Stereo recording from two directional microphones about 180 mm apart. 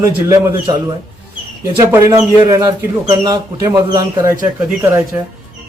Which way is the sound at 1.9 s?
15° right (ahead or behind).